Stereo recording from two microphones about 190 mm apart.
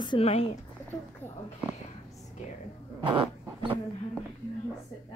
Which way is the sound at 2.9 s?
25° right (ahead or behind).